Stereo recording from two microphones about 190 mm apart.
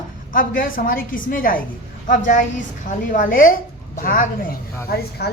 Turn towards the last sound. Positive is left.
turn(degrees=55)  # may be behind; listen again after turning